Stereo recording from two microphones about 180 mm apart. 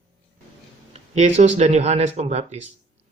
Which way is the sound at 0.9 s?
40° right (ahead or behind).